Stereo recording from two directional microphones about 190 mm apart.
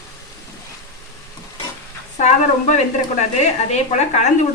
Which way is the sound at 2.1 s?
35° left (ahead or behind).